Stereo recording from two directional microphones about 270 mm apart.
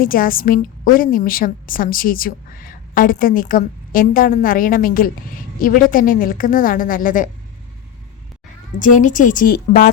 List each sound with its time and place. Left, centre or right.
0.0 s a woman's voice: left
8.8 s a woman's voice: left